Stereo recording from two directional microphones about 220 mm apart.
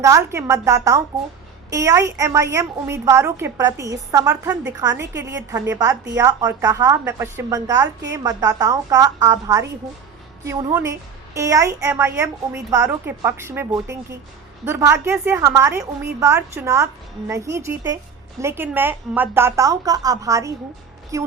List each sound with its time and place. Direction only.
0.0 s a woman's voice: 15° right (ahead or behind)